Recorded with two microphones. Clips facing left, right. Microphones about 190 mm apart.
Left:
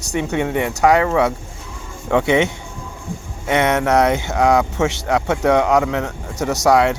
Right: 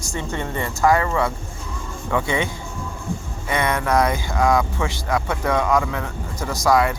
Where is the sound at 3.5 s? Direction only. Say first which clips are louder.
Left 5 dB; 75° left (ahead or behind).